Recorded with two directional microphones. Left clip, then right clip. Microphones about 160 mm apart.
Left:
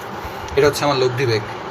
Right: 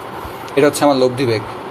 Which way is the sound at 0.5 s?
50° right (ahead or behind).